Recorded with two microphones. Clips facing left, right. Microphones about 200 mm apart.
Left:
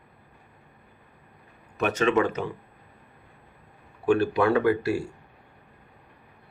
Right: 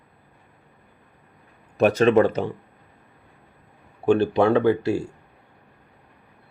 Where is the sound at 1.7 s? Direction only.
35° right (ahead or behind).